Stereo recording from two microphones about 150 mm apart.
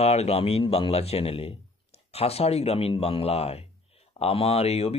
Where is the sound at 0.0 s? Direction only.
45° left (ahead or behind).